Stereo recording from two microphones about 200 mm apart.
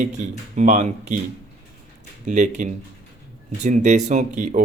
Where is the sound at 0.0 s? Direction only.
35° right (ahead or behind).